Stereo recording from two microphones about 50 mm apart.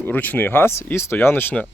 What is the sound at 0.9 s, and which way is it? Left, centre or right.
Speech, left.